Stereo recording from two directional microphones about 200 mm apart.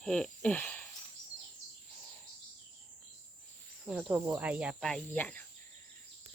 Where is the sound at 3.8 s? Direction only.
5° right (ahead or behind).